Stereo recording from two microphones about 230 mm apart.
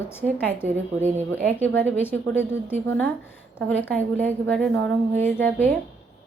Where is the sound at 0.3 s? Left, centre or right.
Centre.